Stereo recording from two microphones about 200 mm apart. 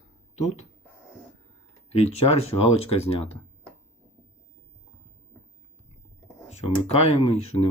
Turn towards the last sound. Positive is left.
turn(degrees=30)  # may be behind; listen again after turning